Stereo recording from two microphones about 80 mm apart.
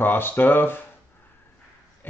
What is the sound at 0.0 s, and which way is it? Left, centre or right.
Speech, left.